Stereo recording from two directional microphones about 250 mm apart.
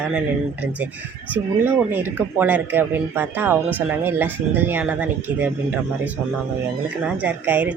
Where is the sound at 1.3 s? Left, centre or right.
Centre.